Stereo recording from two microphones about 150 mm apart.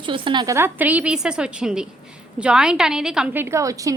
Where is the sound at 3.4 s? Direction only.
20° right (ahead or behind).